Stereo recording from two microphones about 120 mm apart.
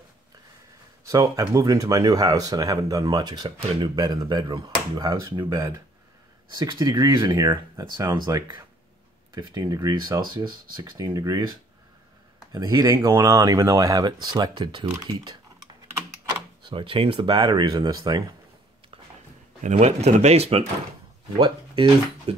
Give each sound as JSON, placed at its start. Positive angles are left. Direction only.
{"t": 1.0, "sound": "speech", "side_deg": -30}
{"t": 12.5, "sound": "speech", "side_deg": -30}
{"t": 16.6, "sound": "speech", "side_deg": -45}
{"t": 19.6, "sound": "speech", "side_deg": -65}
{"t": 21.4, "sound": "speech", "side_deg": -40}